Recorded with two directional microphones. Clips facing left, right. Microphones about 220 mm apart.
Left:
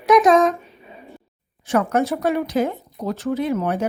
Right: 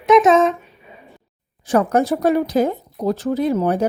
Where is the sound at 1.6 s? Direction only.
35° right (ahead or behind).